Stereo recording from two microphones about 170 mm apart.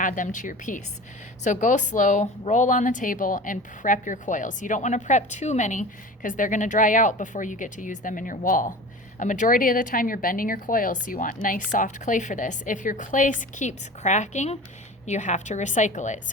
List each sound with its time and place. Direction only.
0.0 s speech: 50° left (ahead or behind)